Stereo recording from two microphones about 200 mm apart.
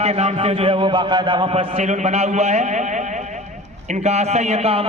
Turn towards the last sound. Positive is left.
turn(degrees=-30)  # may be behind; listen again after turning